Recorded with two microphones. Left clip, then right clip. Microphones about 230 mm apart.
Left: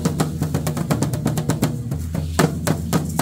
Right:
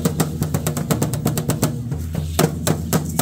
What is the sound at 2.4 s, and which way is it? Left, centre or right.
Music, right.